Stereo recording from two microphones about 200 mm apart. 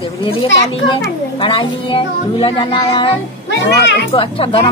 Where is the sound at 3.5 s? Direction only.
60° left (ahead or behind).